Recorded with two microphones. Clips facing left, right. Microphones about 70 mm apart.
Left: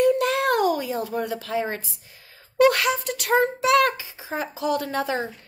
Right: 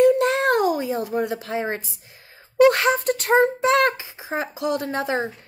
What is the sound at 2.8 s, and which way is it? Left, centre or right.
Speech, right.